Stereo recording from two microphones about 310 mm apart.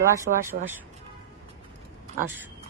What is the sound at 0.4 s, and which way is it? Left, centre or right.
Speech, centre.